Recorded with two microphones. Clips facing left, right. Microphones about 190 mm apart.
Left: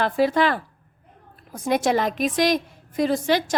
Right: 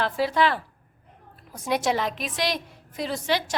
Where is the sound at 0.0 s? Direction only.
50° left (ahead or behind).